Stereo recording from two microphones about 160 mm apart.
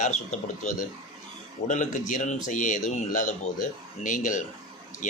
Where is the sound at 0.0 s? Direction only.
50° left (ahead or behind).